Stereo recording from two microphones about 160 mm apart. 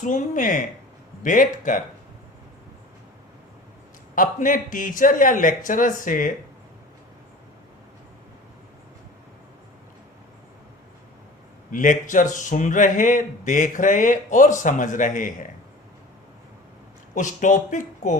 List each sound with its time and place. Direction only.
0.0 s a man's voice: 55° left (ahead or behind)
4.1 s a man's voice: 55° left (ahead or behind)
11.7 s speech: 55° left (ahead or behind)
17.2 s speech: 50° left (ahead or behind)